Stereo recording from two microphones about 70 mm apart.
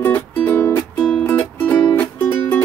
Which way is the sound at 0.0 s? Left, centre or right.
Left.